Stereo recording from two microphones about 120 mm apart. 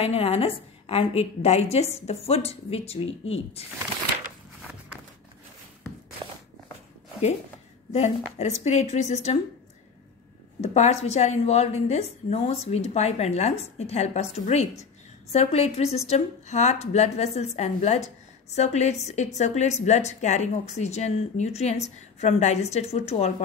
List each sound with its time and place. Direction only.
0.0 s a woman's voice: 55° left (ahead or behind)
7.9 s speech: 65° left (ahead or behind)
10.6 s a woman's voice: 65° left (ahead or behind)